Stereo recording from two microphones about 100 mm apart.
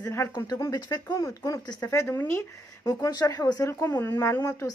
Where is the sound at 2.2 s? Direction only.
20° left (ahead or behind).